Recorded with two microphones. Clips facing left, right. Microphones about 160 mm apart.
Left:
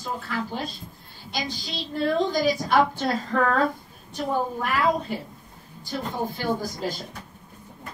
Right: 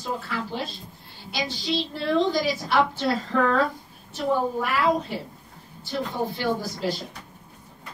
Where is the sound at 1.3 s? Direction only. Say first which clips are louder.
Right 4 dB; 45° left (ahead or behind).